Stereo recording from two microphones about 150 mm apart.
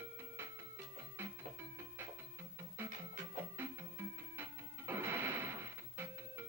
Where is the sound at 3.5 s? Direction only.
15° right (ahead or behind).